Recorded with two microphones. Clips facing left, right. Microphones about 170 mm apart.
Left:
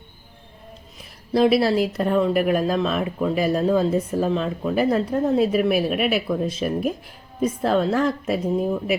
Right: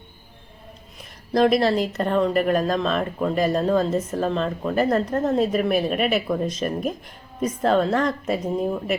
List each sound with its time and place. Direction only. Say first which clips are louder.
1.3 s speech: left 1 dB; 5° left (ahead or behind)